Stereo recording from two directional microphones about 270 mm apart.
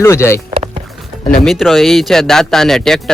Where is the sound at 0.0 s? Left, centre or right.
Centre.